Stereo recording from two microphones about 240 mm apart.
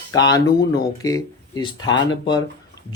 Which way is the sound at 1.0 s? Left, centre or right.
Centre.